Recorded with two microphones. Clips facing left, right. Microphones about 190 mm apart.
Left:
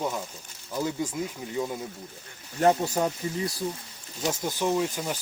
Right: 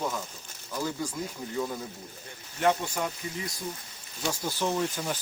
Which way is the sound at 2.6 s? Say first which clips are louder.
Left 4 dB; 35° left (ahead or behind).